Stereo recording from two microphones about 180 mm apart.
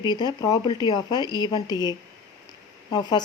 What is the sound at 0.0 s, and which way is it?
Speech, 25° left (ahead or behind).